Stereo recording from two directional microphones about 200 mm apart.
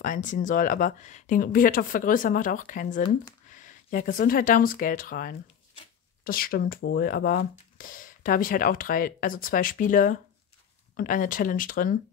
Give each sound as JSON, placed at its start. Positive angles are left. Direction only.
{"t": 0.0, "sound": "speech", "side_deg": 40}